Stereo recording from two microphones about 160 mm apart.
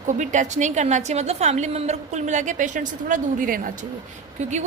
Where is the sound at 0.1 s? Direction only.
50° right (ahead or behind).